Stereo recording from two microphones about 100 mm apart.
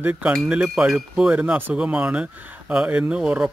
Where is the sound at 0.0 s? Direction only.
15° right (ahead or behind).